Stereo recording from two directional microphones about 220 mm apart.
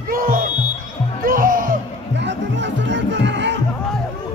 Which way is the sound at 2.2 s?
55° right (ahead or behind).